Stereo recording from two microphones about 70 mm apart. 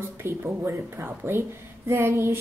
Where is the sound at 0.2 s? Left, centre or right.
Right.